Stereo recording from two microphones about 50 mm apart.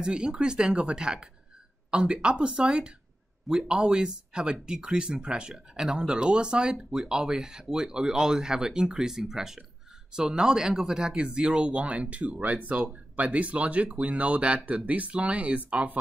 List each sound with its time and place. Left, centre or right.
0.0 s speech: centre